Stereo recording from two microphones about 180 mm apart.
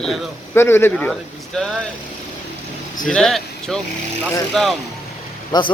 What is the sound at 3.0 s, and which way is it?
A man's voice, centre (ahead or behind).